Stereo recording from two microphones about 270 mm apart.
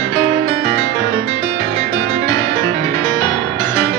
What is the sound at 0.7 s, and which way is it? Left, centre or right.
Music, right.